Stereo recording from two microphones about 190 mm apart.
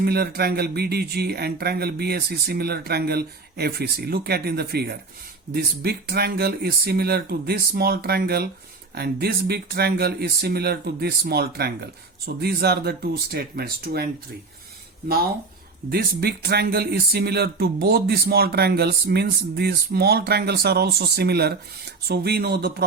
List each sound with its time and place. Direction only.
0.0 s speech: 55° right (ahead or behind)
15.9 s speech: 55° right (ahead or behind)